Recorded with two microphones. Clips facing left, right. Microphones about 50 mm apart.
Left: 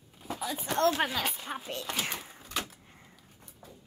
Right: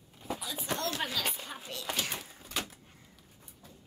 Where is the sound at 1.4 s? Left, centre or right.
Left.